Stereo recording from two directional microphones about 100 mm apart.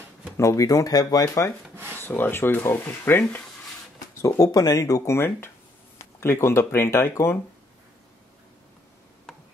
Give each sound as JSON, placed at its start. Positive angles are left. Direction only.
{"t": 0.4, "sound": "speech", "side_deg": 30}
{"t": 2.0, "sound": "speech", "side_deg": 20}
{"t": 4.4, "sound": "speech", "side_deg": 35}